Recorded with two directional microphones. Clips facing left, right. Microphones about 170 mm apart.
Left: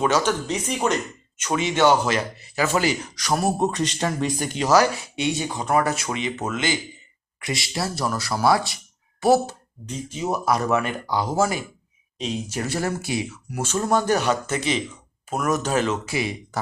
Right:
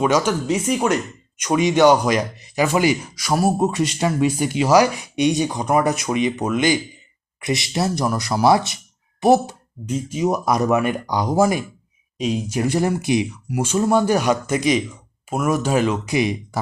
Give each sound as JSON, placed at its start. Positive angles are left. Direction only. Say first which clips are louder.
{"t": 0.0, "sound": "speech", "louder": "right 3 dB", "side_deg": -10}
{"t": 9.8, "sound": "speech", "louder": "right 7 dB", "side_deg": -10}